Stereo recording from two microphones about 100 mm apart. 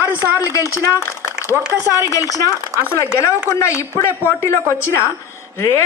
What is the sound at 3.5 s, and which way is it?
A woman's voice, 30° left (ahead or behind).